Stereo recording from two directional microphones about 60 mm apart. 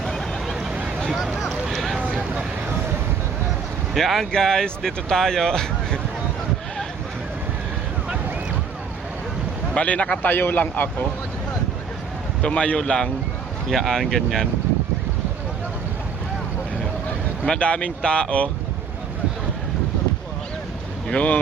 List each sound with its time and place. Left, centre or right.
0.0 s vehicle: centre
0.5 s a sound: centre
1.1 s speech: centre
3.9 s speech: centre
9.7 s speech: left
10.2 s a man's voice: left
12.4 s speech: centre
17.4 s speech: centre
21.1 s speech: left